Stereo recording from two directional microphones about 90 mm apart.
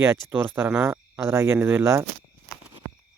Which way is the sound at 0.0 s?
25° right (ahead or behind).